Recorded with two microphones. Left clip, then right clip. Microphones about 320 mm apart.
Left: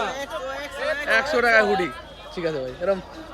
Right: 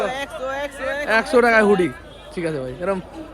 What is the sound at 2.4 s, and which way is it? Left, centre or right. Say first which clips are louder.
Speech: right 1 dB; right.